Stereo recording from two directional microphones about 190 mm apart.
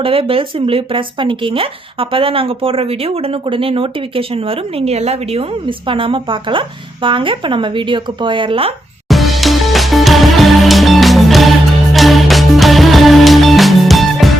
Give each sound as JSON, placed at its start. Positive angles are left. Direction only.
{"t": 0.0, "sound": "speech", "side_deg": -30}
{"t": 9.0, "sound": "music", "side_deg": 0}